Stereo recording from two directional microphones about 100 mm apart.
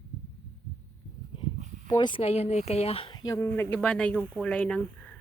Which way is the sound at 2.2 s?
90° left.